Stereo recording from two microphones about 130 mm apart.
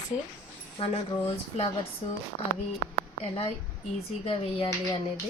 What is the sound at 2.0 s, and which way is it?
Speech, 50° left (ahead or behind).